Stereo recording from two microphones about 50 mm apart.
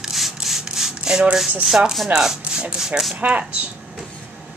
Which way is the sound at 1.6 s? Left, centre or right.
Centre.